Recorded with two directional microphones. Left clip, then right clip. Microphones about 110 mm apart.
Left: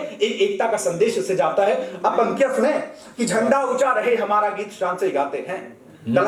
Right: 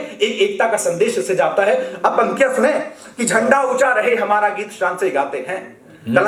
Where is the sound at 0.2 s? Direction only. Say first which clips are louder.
Right 4 dB; 35° right (ahead or behind).